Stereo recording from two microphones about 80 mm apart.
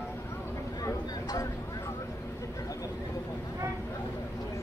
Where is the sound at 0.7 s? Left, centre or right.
Left.